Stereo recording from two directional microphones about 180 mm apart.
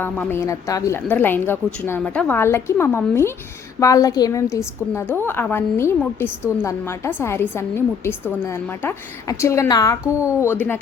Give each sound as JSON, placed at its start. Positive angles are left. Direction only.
{"t": 0.0, "sound": "a woman's voice", "side_deg": 10}